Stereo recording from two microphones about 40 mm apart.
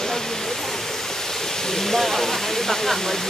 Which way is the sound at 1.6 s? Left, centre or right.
Centre.